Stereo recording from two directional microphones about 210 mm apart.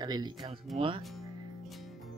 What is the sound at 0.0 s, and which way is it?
Speech, 20° right (ahead or behind).